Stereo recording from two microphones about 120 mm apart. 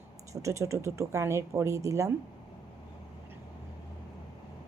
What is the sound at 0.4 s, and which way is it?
Speech, 25° right (ahead or behind).